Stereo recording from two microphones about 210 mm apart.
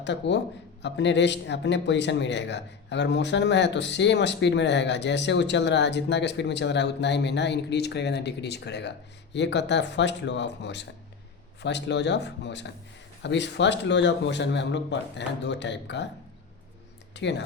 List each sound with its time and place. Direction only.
0.0 s a man's voice: 55° left (ahead or behind)
17.2 s a man's voice: 55° left (ahead or behind)